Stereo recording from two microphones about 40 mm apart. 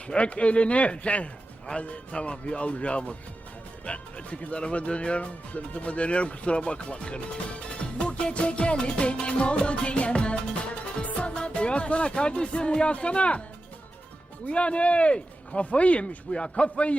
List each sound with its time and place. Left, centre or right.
0.2 s speech: left
14.4 s speech: left